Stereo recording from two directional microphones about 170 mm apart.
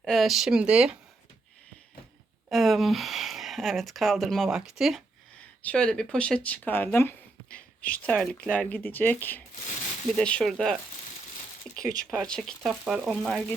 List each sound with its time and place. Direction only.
0.0 s speech: centre (ahead or behind)
2.5 s speech: centre (ahead or behind)
11.8 s speech: 20° right (ahead or behind)
12.3 s speech: 5° left (ahead or behind)